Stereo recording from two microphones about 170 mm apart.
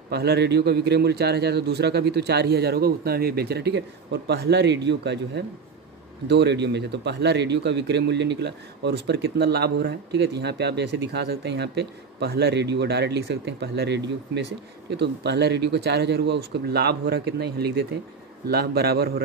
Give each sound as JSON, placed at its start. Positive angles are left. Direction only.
{"t": 0.1, "sound": "a man's voice", "side_deg": -75}